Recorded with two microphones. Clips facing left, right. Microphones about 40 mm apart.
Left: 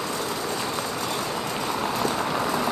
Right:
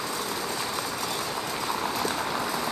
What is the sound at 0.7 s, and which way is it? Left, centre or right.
Vehicle, left.